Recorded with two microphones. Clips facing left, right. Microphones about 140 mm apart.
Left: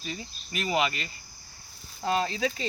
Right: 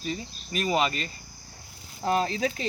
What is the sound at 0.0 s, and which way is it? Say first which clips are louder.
Cricket: right 5 dB; 35° right (ahead or behind).